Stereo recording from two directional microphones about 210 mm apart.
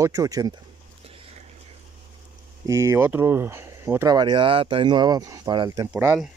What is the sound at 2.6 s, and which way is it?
Speech, 15° right (ahead or behind).